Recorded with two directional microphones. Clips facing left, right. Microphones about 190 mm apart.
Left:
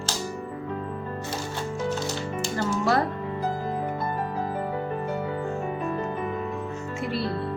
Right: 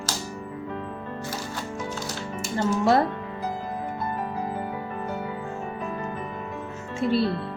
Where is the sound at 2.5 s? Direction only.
25° right (ahead or behind).